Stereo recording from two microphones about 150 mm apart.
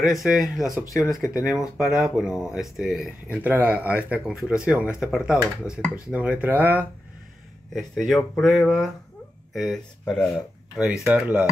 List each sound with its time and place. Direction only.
0.0 s speech: centre (ahead or behind)
5.7 s speech: 20° left (ahead or behind)
6.0 s speech: 10° right (ahead or behind)
7.7 s speech: centre (ahead or behind)
10.8 s speech: 5° right (ahead or behind)